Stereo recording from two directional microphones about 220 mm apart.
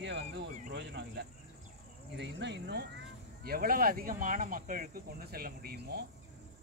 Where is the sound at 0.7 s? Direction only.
50° right (ahead or behind).